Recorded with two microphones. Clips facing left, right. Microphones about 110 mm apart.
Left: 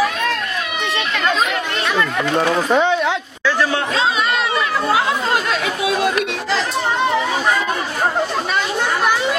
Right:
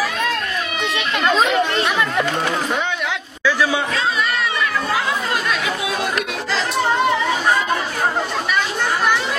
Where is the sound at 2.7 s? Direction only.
35° left (ahead or behind).